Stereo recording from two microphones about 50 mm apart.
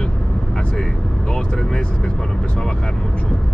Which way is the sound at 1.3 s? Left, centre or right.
Centre.